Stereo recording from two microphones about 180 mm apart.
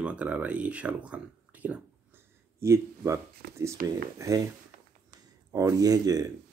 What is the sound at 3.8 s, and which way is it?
Speech, 50° right (ahead or behind).